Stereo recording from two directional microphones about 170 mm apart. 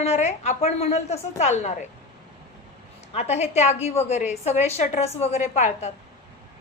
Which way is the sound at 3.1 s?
40° left (ahead or behind).